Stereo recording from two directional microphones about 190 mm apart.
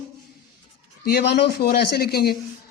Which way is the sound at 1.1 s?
60° left (ahead or behind).